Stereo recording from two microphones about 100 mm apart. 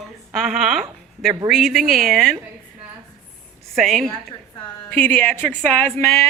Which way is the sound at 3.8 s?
Centre (ahead or behind).